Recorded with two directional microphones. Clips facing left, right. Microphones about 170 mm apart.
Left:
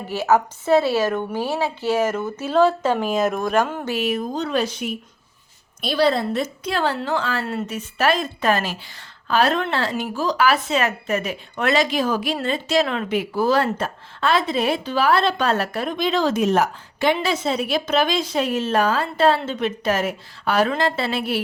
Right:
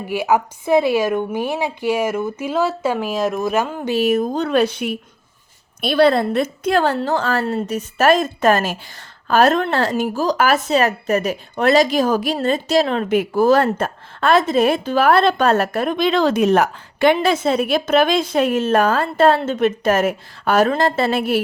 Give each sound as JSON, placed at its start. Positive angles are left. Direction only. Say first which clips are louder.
{"t": 0.1, "sound": "a woman's voice", "louder": "right 1 dB", "side_deg": -10}
{"t": 3.9, "sound": "speech", "louder": "right 7 dB", "side_deg": -45}